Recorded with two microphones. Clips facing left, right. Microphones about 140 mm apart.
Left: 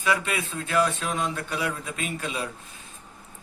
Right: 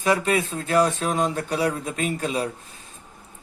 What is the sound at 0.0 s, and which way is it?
Speech, 40° right (ahead or behind).